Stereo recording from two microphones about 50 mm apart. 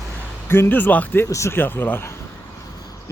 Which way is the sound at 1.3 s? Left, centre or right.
Left.